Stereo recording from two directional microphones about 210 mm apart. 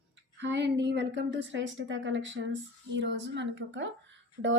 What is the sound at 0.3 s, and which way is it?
A woman's voice, 55° right (ahead or behind).